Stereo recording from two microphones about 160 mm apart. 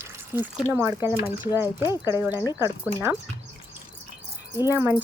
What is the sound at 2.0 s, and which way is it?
Speech, 15° right (ahead or behind).